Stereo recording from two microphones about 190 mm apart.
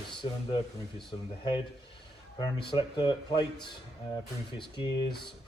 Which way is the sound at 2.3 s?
25° left (ahead or behind).